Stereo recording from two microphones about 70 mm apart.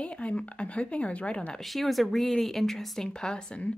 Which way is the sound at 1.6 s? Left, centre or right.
Centre.